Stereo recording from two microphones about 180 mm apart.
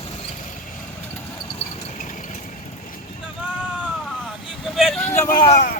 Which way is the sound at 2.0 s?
45° left (ahead or behind).